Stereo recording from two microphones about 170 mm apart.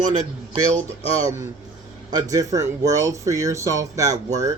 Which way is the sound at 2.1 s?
20° right (ahead or behind).